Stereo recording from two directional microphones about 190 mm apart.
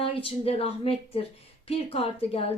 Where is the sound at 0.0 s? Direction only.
30° left (ahead or behind).